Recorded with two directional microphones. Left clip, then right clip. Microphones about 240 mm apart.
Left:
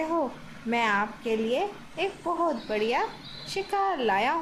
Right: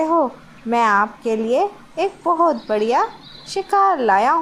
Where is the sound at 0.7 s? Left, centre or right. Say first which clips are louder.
Right 10 dB; right.